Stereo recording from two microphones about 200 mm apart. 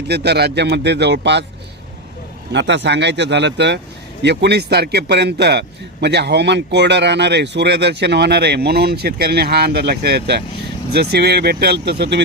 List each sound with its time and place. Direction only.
0.1 s a man's voice: 55° right (ahead or behind)
2.5 s a man's voice: 60° right (ahead or behind)